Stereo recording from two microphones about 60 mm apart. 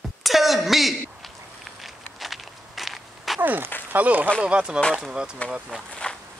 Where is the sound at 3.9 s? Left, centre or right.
Right; by 5.3 s centre.